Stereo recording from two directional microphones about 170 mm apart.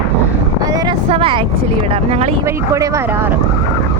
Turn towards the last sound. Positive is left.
turn(degrees=-10)  # may be behind; listen again after turning